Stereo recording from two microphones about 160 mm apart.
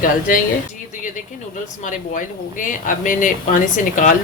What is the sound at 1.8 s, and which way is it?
Speech, 55° left (ahead or behind).